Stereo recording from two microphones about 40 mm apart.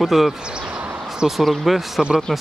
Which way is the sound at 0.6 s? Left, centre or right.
Right.